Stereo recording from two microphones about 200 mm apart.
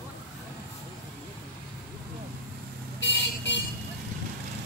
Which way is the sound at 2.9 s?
65° left (ahead or behind).